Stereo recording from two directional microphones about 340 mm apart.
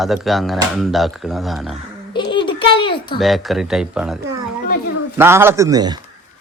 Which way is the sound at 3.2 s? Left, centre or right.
Centre.